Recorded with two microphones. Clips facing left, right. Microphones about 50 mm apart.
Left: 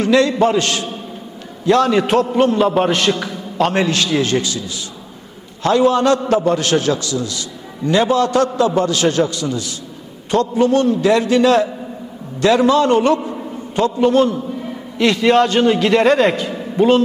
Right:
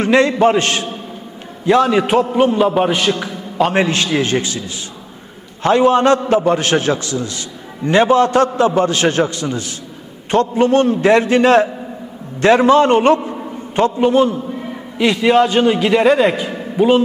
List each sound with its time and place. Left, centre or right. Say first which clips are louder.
0.0 s a man's voice: right 1 dB; right
1.6 s a man's voice: right 1 dB; centre
3.7 s a man's voice: right 1 dB; right
5.6 s a man's voice: right 2 dB; right
13.9 s a man's voice: left 1 dB; centre